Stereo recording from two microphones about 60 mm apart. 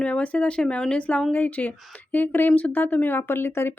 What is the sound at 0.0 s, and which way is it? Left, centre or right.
A woman's voice, left.